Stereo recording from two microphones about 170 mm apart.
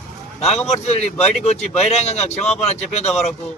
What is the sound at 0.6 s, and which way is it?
A man's voice, 40° left (ahead or behind).